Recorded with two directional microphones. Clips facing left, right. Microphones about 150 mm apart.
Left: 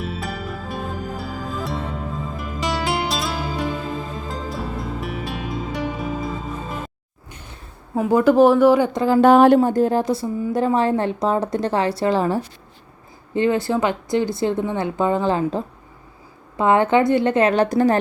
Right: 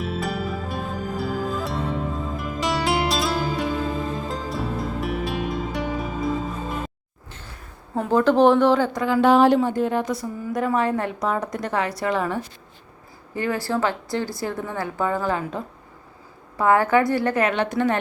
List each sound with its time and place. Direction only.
0.0 s music: centre (ahead or behind)
7.9 s speech: 10° left (ahead or behind)
9.2 s speech: 55° left (ahead or behind)
9.6 s a woman's voice: 40° left (ahead or behind); by 17.5 s 25° left (ahead or behind)
17.5 s a woman's voice: 40° left (ahead or behind)